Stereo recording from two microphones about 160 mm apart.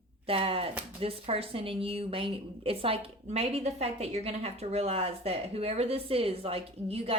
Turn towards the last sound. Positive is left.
turn(degrees=-40)  # may be behind; listen again after turning